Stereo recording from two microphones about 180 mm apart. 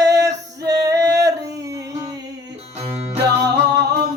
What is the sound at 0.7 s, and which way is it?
Music, 20° right (ahead or behind).